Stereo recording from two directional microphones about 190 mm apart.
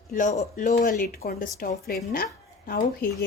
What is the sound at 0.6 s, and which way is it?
Speech, 40° left (ahead or behind).